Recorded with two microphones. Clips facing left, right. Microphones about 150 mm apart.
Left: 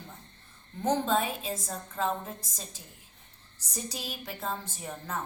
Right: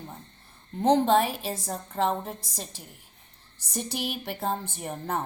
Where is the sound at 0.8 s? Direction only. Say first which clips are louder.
Right 6 dB; 65° right (ahead or behind).